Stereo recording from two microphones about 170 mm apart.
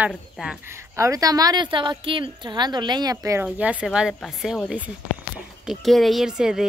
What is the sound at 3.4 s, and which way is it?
A woman's voice, 10° right (ahead or behind).